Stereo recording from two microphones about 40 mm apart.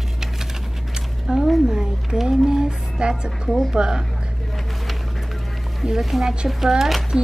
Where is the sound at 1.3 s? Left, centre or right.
Right.